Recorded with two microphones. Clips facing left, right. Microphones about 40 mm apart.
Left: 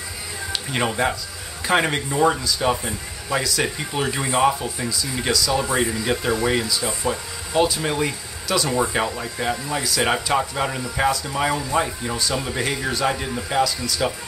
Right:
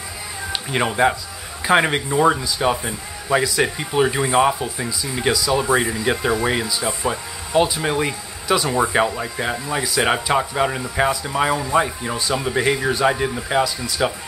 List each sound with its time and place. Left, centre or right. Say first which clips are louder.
0.7 s speech: right 4 dB; centre